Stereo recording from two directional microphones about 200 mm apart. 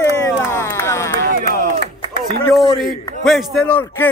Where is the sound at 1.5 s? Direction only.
45° right (ahead or behind).